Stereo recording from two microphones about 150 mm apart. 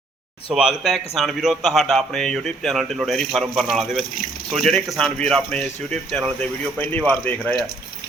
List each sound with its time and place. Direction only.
0.5 s speech: 5° right (ahead or behind)